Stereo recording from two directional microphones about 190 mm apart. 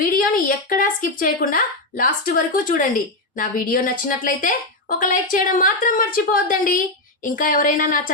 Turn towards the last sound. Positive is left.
turn(degrees=45)  # may be behind; listen again after turning